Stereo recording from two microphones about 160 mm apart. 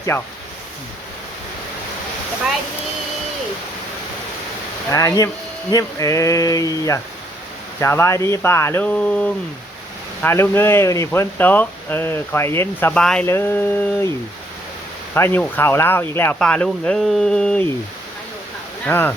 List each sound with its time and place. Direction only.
0.1 s speech: 10° left (ahead or behind)
4.9 s speech: 20° left (ahead or behind)
15.1 s speech: 15° left (ahead or behind)
18.9 s speech: 15° left (ahead or behind)